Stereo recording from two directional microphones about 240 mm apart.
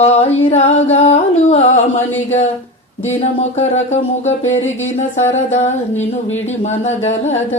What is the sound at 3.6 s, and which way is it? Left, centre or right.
Music, left.